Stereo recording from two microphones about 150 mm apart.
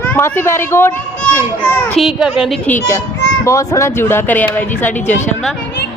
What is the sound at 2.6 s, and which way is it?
Speech, 10° left (ahead or behind).